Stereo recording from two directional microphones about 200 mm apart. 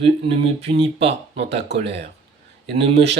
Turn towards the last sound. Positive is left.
turn(degrees=-30)  # may be behind; listen again after turning